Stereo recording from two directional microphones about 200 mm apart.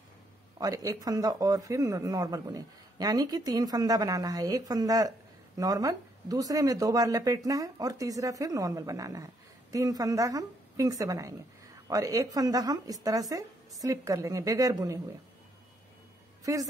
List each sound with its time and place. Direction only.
0.6 s speech: 20° right (ahead or behind)
16.5 s speech: 15° right (ahead or behind)